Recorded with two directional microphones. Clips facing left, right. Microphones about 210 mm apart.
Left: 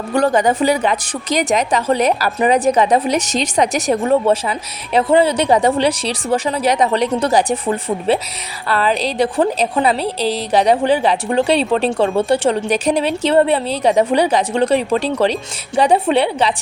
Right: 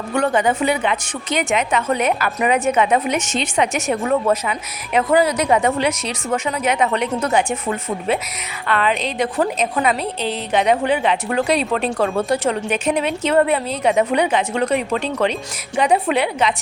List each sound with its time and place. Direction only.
0.1 s a woman's voice: 35° left (ahead or behind)